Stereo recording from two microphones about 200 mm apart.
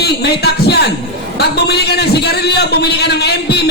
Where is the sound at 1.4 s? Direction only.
55° left (ahead or behind).